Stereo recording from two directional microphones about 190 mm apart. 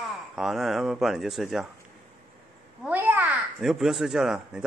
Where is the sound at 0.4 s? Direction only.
Centre (ahead or behind).